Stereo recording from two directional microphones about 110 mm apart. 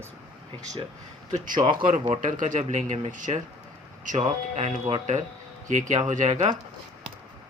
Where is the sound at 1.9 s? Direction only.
90° right.